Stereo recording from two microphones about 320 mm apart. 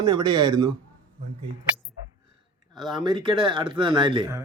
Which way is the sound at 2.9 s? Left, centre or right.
Centre.